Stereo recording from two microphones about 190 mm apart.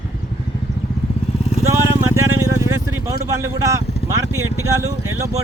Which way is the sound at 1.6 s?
15° right (ahead or behind).